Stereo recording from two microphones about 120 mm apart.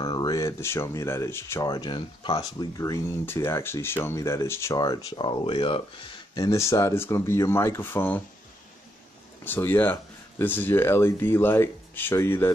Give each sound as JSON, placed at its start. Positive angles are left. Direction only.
{"t": 0.0, "sound": "speech", "side_deg": 35}
{"t": 2.8, "sound": "speech", "side_deg": 25}
{"t": 4.7, "sound": "speech", "side_deg": 35}
{"t": 6.3, "sound": "speech", "side_deg": 25}
{"t": 9.4, "sound": "speech", "side_deg": 15}